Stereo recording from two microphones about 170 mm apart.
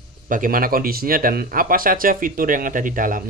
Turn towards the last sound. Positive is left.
turn(degrees=-50)  # may be behind; listen again after turning